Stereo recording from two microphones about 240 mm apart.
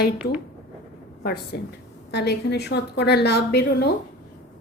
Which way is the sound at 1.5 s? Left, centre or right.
Left.